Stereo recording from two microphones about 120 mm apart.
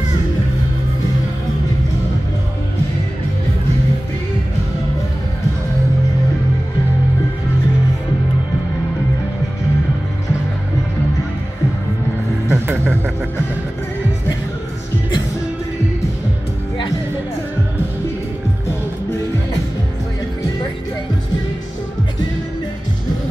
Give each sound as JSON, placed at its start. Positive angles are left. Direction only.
{"t": 12.4, "sound": "vehicle", "side_deg": -20}